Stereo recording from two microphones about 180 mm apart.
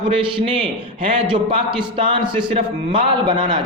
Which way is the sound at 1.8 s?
30° right (ahead or behind).